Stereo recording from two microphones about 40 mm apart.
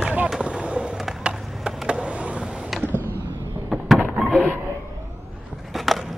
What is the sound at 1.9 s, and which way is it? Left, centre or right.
Vehicle, right.